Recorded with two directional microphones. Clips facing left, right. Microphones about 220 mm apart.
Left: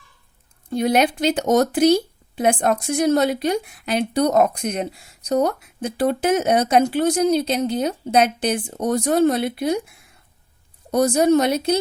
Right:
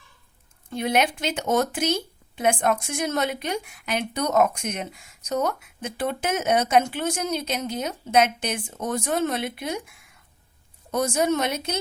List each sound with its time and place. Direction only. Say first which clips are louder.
0.7 s speech: left 5 dB; 35° left (ahead or behind)